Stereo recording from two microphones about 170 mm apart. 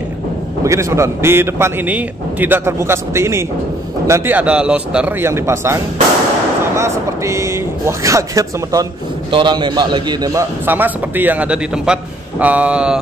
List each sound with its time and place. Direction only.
0.7 s a man's voice: 15° right (ahead or behind)
6.8 s a man's voice: 15° right (ahead or behind)
10.6 s a man's voice: 10° right (ahead or behind)